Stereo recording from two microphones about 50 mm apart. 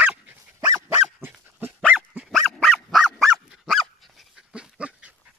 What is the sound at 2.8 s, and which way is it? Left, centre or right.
Dog, centre.